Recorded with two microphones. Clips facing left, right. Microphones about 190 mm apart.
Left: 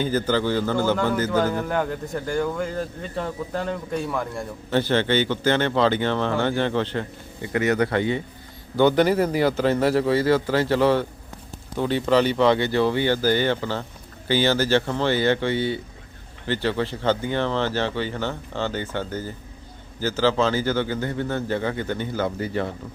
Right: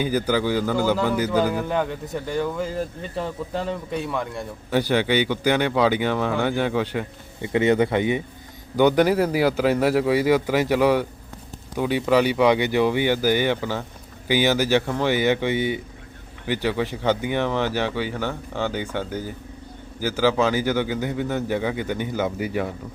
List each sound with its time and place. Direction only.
0.0 s a man's voice: 10° right (ahead or behind)
4.7 s speech: 10° right (ahead or behind)
7.4 s speech: 25° right (ahead or behind)